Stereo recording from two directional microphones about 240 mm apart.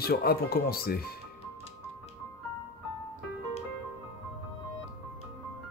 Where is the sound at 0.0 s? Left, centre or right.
Left.